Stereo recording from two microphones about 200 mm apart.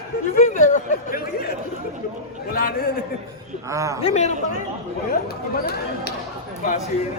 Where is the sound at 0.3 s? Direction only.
40° left (ahead or behind).